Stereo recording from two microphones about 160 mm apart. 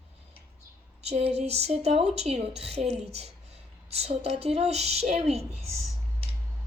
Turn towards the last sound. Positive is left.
turn(degrees=-40)  # may be behind; listen again after turning